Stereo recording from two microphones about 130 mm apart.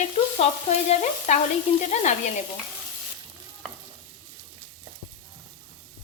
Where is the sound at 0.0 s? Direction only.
55° left (ahead or behind).